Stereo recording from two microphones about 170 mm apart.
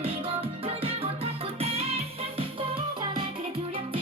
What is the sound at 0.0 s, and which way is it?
Music, 35° right (ahead or behind).